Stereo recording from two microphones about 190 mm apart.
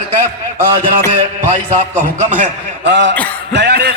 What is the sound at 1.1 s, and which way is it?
Speech, 40° right (ahead or behind).